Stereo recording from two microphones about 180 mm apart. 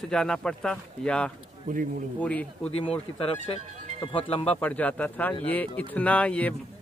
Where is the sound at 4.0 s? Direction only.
30° left (ahead or behind).